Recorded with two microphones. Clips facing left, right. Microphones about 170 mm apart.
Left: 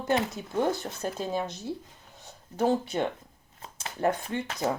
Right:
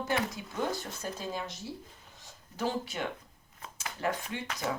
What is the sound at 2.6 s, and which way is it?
Speech, 55° left (ahead or behind).